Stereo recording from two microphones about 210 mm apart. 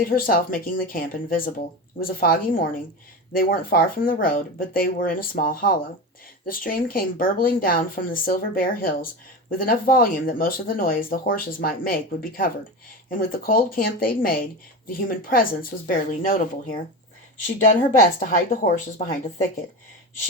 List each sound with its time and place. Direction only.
0.0 s a woman's voice: 45° left (ahead or behind)
18.2 s a woman's voice: 40° left (ahead or behind)